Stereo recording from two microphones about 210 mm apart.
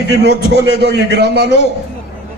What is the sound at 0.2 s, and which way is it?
A man's voice, 55° right (ahead or behind).